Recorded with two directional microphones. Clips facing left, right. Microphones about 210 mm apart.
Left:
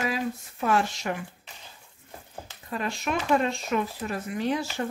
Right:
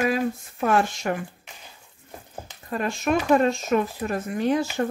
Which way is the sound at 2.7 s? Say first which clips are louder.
Right 6 dB; 45° right (ahead or behind).